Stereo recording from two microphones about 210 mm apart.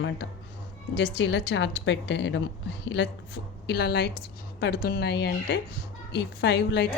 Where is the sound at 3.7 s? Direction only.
50° left (ahead or behind).